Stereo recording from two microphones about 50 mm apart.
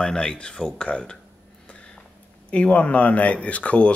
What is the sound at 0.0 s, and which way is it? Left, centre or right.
Speech, centre.